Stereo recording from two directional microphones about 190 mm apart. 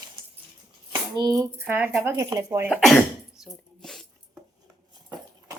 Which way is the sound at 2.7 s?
Centre (ahead or behind).